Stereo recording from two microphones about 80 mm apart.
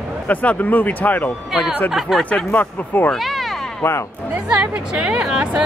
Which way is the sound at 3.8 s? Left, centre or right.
Left.